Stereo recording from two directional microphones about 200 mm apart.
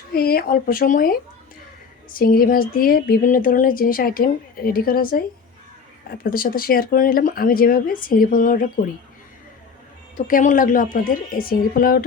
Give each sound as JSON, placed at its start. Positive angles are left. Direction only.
{"t": 0.1, "sound": "speech", "side_deg": 50}
{"t": 10.2, "sound": "speech", "side_deg": 40}